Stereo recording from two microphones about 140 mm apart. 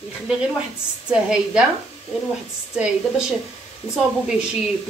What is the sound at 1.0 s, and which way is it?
Speech, 5° right (ahead or behind).